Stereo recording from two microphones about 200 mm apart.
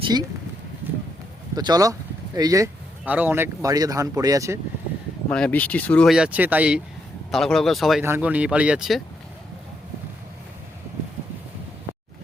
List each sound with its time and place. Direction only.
0.0 s speech: 20° right (ahead or behind)
1.5 s speech: 20° right (ahead or behind)
5.3 s speech: 5° left (ahead or behind)